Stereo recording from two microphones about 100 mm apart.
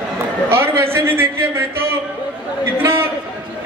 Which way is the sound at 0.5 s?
25° right (ahead or behind).